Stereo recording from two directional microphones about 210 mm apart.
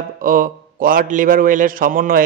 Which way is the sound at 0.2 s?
40° right (ahead or behind).